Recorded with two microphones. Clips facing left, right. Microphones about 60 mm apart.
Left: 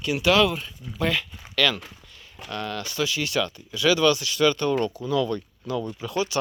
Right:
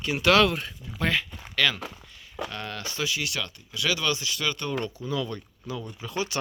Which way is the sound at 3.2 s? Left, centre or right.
Centre.